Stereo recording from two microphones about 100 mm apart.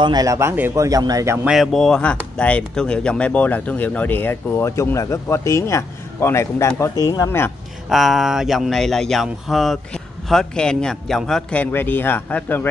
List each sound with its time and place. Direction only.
0.0 s a man's voice: 40° right (ahead or behind); by 0.7 s 25° right (ahead or behind)
0.7 s speech: 35° right (ahead or behind)
1.4 s speech: centre (ahead or behind); by 7.2 s 40° left (ahead or behind)
7.9 s speech: centre (ahead or behind)
11.6 s speech: 20° left (ahead or behind)